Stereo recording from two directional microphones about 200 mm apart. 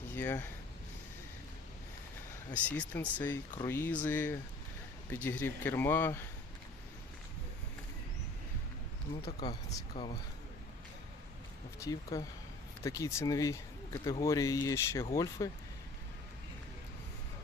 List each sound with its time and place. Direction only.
0.1 s speech: 10° left (ahead or behind)
2.5 s speech: 10° left (ahead or behind)
9.2 s speech: 25° left (ahead or behind)
11.8 s speech: 15° left (ahead or behind)